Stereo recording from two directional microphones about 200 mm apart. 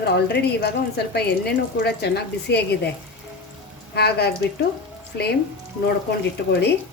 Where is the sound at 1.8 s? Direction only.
55° left (ahead or behind).